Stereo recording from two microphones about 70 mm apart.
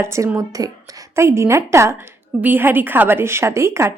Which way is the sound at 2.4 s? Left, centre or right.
Right.